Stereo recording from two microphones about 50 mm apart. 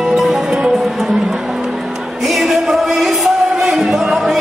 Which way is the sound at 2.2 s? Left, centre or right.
Centre.